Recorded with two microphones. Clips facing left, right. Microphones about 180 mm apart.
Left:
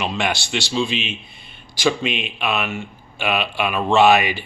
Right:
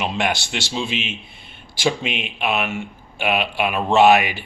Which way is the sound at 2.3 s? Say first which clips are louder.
Right 1 dB; 15° right (ahead or behind).